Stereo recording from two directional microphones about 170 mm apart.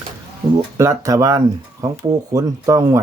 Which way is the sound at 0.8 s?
15° right (ahead or behind).